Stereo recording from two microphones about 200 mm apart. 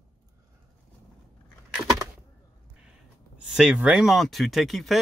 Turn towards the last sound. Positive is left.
turn(degrees=0)  # may be behind; listen again after turning